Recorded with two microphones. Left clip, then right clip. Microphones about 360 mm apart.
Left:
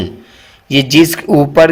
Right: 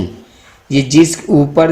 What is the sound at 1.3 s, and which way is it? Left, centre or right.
Speech, left.